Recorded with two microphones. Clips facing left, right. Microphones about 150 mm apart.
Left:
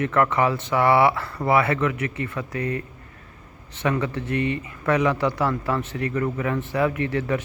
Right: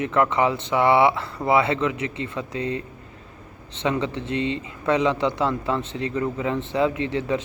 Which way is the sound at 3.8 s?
20° right (ahead or behind).